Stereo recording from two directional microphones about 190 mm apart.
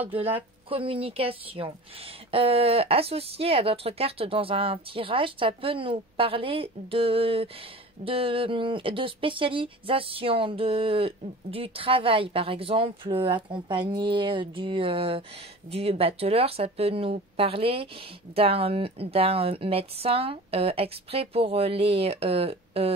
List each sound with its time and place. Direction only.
0.1 s a woman's voice: 30° right (ahead or behind)